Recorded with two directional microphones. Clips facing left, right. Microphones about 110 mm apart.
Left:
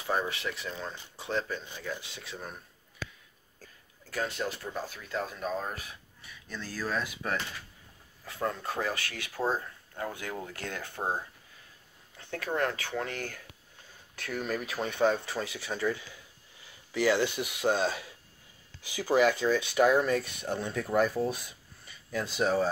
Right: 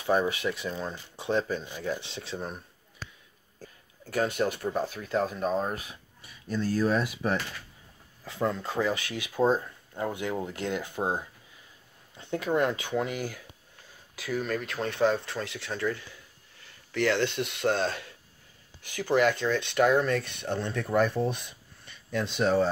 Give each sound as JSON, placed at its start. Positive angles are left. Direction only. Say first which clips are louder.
{"t": 0.0, "sound": "speech", "louder": "right 6 dB", "side_deg": -20}
{"t": 4.6, "sound": "speech", "louder": "right 7 dB", "side_deg": -30}